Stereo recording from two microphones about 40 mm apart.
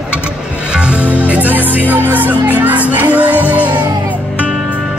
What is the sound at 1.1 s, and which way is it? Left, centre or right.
Music, right.